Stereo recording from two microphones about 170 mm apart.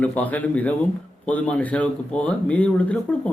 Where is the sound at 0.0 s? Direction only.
10° left (ahead or behind).